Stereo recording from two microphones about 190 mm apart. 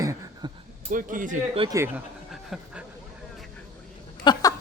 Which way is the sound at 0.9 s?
45° right (ahead or behind).